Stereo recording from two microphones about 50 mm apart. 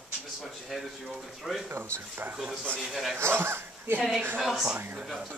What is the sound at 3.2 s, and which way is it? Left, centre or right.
Speech, right.